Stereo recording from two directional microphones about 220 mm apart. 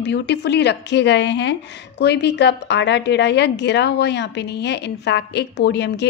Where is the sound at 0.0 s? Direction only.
50° left (ahead or behind).